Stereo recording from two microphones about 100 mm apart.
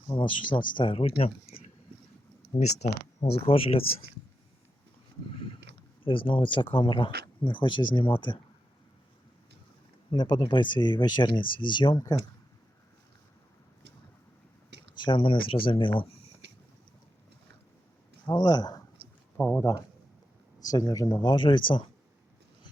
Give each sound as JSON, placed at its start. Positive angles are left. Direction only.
{"t": 0.1, "sound": "speech", "side_deg": 55}
{"t": 2.5, "sound": "speech", "side_deg": 25}
{"t": 3.3, "sound": "speech", "side_deg": 75}
{"t": 6.1, "sound": "speech", "side_deg": 60}
{"t": 10.1, "sound": "speech", "side_deg": 50}
{"t": 14.9, "sound": "speech", "side_deg": 55}
{"t": 18.3, "sound": "speech", "side_deg": 40}
{"t": 19.4, "sound": "speech", "side_deg": 15}
{"t": 20.7, "sound": "speech", "side_deg": 40}